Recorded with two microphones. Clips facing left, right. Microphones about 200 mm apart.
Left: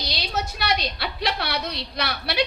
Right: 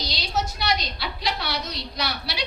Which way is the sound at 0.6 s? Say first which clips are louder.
Left 1 dB; 60° left (ahead or behind).